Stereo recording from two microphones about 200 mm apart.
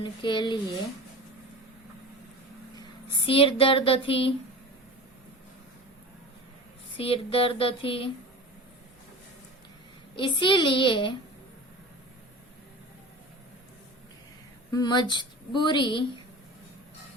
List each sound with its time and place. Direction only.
0.0 s speech: 25° left (ahead or behind)
3.2 s speech: 25° left (ahead or behind)
6.9 s speech: 30° left (ahead or behind)
10.2 s speech: 25° left (ahead or behind)
14.7 s speech: 20° left (ahead or behind)